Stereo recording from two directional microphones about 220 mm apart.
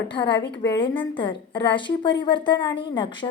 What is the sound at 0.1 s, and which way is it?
A woman's voice, 20° left (ahead or behind).